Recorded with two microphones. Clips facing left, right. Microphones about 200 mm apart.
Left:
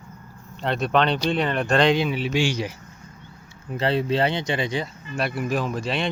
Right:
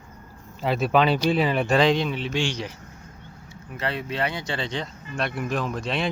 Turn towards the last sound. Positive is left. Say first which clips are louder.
# left 1 dB
turn(degrees=0)  # may be behind; listen again after turning